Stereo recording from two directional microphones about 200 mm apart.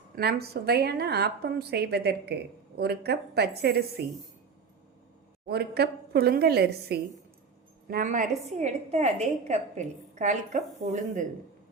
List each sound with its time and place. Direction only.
0.2 s a woman's voice: 50° right (ahead or behind)
5.5 s a woman's voice: 55° right (ahead or behind)